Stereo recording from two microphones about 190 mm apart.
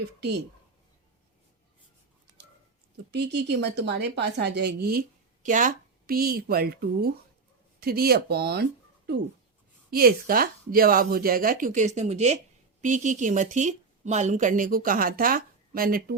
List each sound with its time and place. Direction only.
0.2 s speech: 65° right (ahead or behind)
3.1 s a woman's voice: 60° right (ahead or behind)
9.9 s a woman's voice: 50° right (ahead or behind)